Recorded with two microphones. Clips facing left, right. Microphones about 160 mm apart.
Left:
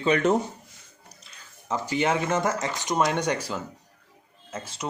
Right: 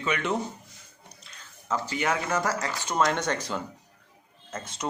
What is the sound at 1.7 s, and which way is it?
Speech, 20° left (ahead or behind).